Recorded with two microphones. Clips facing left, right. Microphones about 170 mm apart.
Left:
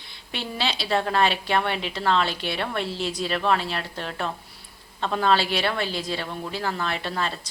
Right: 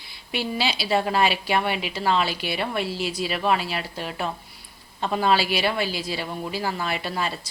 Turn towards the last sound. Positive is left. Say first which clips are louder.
# right 1 dB
turn(degrees=-10)  # may be behind; listen again after turning